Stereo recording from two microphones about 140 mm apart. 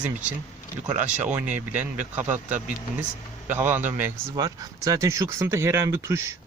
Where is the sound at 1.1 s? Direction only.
10° right (ahead or behind).